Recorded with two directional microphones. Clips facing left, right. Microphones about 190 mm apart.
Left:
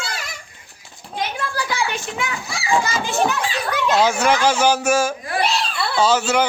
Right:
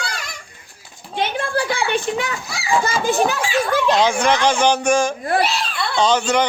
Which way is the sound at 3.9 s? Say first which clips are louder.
Left 2 dB; 5° left (ahead or behind).